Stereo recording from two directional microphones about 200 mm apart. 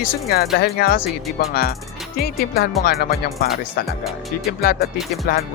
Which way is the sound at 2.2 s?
50° left (ahead or behind).